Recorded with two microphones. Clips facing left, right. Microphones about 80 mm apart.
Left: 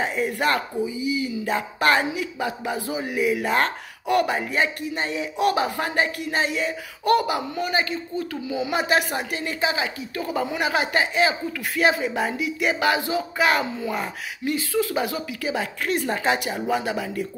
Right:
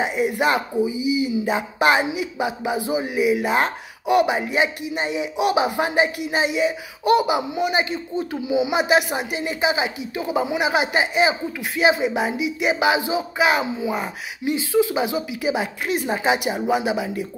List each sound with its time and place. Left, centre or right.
0.0 s speech: centre
7.9 s speech: right
8.5 s speech: centre